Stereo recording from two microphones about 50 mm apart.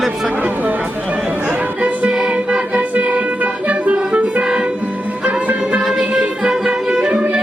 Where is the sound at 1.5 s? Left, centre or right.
Right.